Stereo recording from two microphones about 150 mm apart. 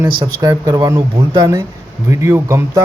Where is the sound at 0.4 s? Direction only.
25° right (ahead or behind).